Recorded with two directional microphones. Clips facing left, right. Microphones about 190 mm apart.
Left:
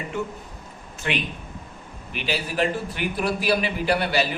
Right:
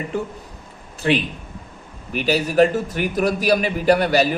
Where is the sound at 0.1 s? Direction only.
35° right (ahead or behind).